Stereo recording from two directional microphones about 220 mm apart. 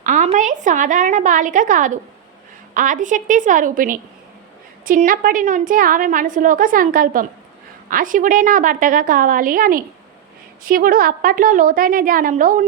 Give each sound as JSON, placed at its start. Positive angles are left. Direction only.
{"t": 0.0, "sound": "a woman's voice", "side_deg": -35}